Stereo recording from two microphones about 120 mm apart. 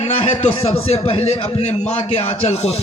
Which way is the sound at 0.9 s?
55° left (ahead or behind).